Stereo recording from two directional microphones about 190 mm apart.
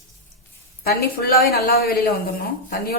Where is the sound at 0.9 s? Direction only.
55° left (ahead or behind).